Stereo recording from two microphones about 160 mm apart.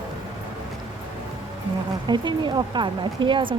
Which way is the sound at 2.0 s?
30° right (ahead or behind).